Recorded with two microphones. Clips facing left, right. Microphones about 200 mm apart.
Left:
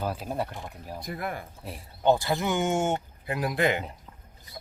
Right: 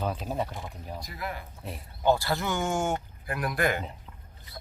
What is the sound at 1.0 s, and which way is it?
Speech, 55° left (ahead or behind).